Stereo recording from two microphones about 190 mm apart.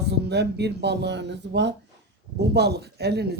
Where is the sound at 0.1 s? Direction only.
60° right (ahead or behind).